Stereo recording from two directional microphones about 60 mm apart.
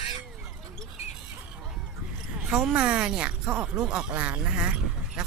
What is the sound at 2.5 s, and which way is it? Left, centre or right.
Speech, centre.